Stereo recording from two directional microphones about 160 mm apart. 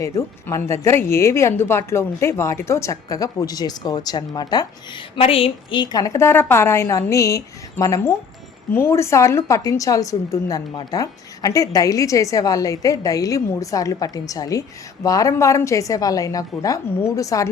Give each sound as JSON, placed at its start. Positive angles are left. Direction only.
{"t": 0.0, "sound": "speech", "side_deg": 20}